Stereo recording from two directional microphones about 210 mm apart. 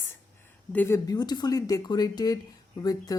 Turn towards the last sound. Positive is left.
turn(degrees=15)  # may be behind; listen again after turning